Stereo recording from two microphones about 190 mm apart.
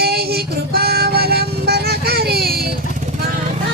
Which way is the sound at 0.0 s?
55° right (ahead or behind).